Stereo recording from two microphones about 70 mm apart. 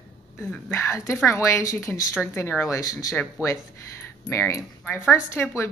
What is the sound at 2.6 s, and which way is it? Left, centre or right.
Speech, left.